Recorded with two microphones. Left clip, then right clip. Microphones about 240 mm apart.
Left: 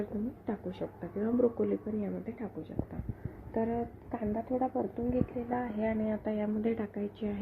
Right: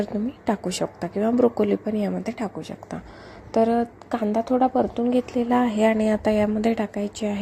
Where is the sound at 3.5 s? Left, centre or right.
Right.